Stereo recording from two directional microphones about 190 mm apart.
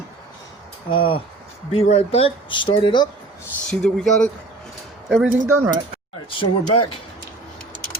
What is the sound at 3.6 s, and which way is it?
Speech, centre (ahead or behind).